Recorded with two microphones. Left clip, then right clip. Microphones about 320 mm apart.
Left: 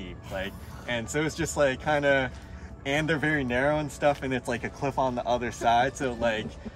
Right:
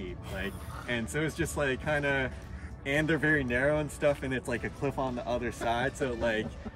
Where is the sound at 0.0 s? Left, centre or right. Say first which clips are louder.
Left 3 dB; centre.